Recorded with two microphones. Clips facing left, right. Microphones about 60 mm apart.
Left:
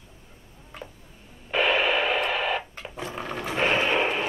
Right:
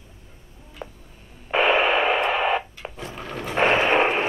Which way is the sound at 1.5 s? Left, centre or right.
Right.